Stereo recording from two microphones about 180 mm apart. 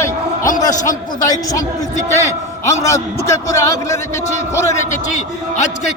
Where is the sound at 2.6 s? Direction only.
15° left (ahead or behind).